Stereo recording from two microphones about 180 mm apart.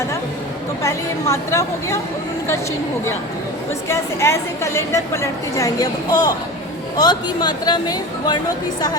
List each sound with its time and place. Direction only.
0.8 s a woman's voice: 15° left (ahead or behind)
3.8 s a woman's voice: 15° left (ahead or behind)